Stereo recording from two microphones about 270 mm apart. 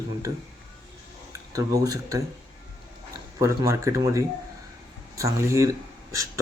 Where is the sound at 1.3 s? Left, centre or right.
Centre.